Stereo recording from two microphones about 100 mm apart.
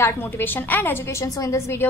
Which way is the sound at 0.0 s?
20° left (ahead or behind).